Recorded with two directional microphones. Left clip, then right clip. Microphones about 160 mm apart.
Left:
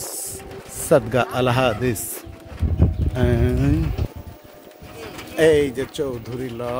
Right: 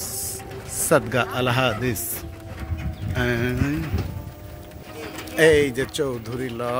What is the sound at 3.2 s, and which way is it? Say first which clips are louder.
Speech: left 2 dB; 35° left (ahead or behind).